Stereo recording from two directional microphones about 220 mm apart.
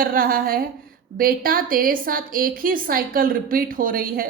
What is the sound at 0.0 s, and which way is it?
A woman's voice, 40° right (ahead or behind).